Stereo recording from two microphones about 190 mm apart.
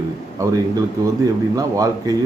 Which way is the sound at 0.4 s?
20° right (ahead or behind).